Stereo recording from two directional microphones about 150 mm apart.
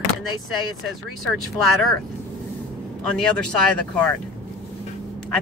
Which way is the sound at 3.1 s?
5° left (ahead or behind).